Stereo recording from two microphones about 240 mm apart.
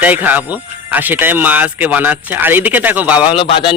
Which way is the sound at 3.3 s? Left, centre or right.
Left.